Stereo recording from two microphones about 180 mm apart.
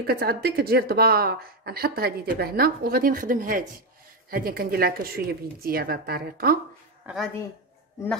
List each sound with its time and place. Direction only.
0.0 s speech: 60° right (ahead or behind)
7.0 s speech: 10° right (ahead or behind)